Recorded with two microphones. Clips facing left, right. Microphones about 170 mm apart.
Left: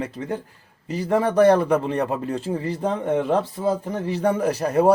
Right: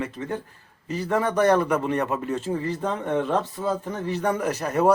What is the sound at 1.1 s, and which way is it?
Speech, 30° left (ahead or behind).